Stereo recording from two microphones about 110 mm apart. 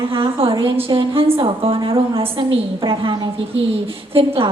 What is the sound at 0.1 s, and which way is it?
A woman's voice, 50° right (ahead or behind).